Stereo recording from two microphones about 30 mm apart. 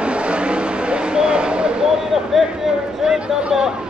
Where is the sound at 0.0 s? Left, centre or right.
Right.